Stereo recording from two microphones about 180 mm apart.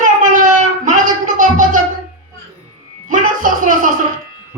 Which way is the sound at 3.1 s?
45° right (ahead or behind).